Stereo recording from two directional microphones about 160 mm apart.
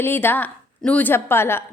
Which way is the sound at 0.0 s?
15° left (ahead or behind).